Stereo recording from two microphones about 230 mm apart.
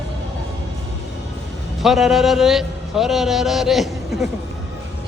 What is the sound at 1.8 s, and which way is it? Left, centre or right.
A man's voice, centre.